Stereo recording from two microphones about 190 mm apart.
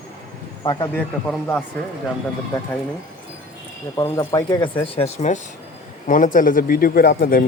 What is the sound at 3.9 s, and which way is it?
A man's voice, 20° left (ahead or behind).